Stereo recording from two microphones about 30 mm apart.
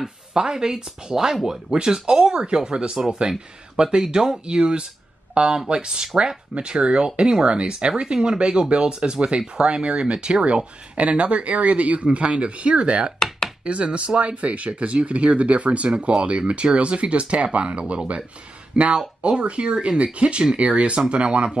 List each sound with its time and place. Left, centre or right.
0.3 s speech: right
1.7 s speech: right
13.2 s chopping: centre
13.7 s speech: right